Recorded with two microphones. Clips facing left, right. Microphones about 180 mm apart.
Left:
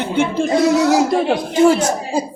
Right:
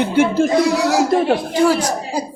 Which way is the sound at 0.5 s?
25° left (ahead or behind).